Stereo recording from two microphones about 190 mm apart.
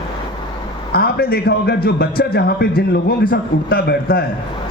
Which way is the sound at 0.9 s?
55° left (ahead or behind).